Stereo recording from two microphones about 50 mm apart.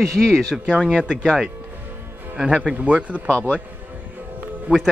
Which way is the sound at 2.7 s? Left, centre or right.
Right.